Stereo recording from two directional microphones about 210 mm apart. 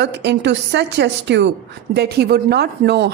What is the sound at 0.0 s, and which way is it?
A woman's voice, 55° right (ahead or behind).